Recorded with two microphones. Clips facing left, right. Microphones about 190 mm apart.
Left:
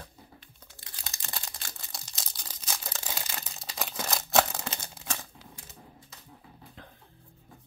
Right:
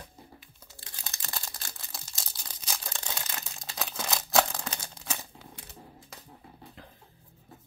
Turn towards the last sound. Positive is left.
turn(degrees=-5)  # may be behind; listen again after turning